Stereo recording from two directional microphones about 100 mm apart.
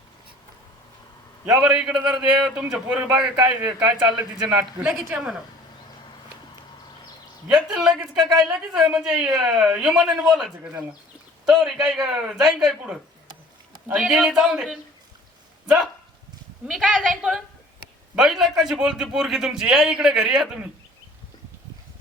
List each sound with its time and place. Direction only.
1.5 s a man's voice: 5° right (ahead or behind)
3.6 s speech: 20° right (ahead or behind)
5.1 s speech: 5° right (ahead or behind)
7.5 s a man's voice: 5° right (ahead or behind)
10.6 s speech: 15° right (ahead or behind)
11.4 s a man's voice: centre (ahead or behind)
16.6 s a man's voice: centre (ahead or behind)